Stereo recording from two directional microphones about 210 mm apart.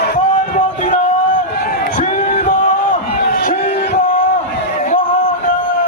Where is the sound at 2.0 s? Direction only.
35° left (ahead or behind).